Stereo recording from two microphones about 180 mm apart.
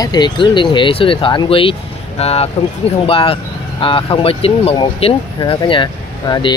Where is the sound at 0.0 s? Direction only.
25° left (ahead or behind).